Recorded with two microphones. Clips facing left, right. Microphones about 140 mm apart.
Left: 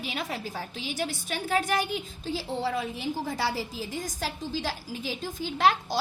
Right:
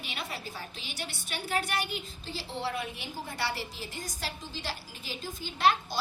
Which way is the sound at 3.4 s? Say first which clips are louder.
Left 5 dB; 90° left.